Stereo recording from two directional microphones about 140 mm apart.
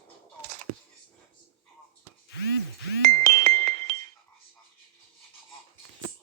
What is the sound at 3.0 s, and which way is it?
Music, 60° right (ahead or behind).